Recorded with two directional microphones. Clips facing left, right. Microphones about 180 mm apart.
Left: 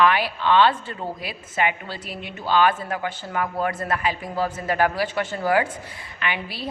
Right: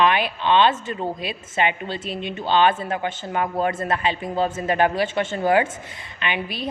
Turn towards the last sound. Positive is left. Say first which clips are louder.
# right 2 dB
turn(degrees=-20)  # may be behind; listen again after turning